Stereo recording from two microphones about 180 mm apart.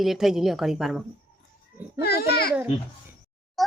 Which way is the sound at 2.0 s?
60° left (ahead or behind).